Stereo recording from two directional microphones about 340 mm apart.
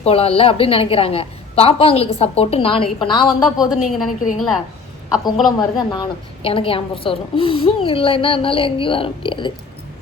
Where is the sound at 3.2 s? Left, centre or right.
Centre.